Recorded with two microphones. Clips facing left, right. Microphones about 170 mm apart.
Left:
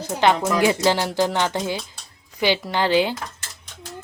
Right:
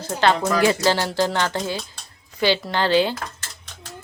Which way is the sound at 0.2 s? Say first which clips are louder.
Even; 15° left (ahead or behind).